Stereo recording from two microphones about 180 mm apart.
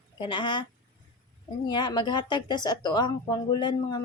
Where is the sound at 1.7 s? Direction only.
25° left (ahead or behind).